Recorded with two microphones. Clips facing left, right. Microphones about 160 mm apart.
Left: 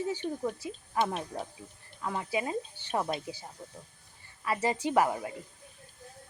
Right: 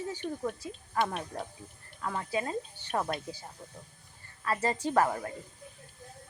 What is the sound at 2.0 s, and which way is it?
Speech, 10° left (ahead or behind).